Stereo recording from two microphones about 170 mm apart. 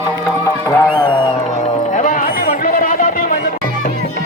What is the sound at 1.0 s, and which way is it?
Music, 30° left (ahead or behind).